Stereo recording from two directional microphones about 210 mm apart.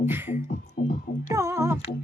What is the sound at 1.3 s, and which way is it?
Humming, 15° right (ahead or behind).